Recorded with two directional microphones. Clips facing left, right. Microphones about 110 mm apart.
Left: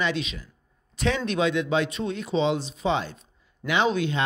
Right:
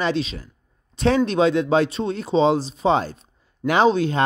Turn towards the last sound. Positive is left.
turn(degrees=-35)  # may be behind; listen again after turning